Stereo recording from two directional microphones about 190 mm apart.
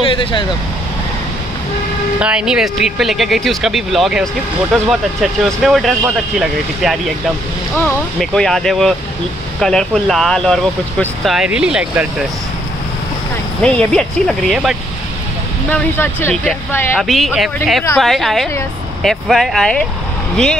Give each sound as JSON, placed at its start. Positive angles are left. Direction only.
{"t": 0.0, "sound": "speech", "side_deg": 25}
{"t": 2.1, "sound": "speech", "side_deg": -5}
{"t": 13.6, "sound": "speech", "side_deg": 5}
{"t": 15.7, "sound": "speech", "side_deg": 10}
{"t": 17.0, "sound": "speech", "side_deg": 0}